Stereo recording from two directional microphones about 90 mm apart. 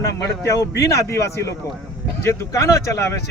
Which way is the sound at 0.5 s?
40° left (ahead or behind).